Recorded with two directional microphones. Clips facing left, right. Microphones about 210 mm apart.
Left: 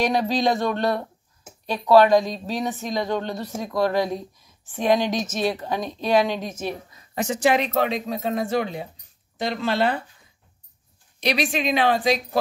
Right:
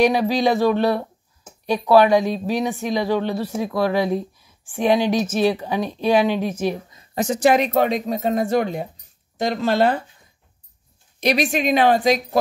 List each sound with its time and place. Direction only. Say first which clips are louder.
0.0 s speech: right 4 dB; 10° right (ahead or behind)
7.0 s speech: right 3 dB; 35° right (ahead or behind)
11.1 s speech: right 4 dB; 45° right (ahead or behind)